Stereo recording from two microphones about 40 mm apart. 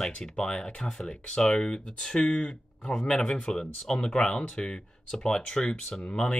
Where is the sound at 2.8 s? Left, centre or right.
Centre.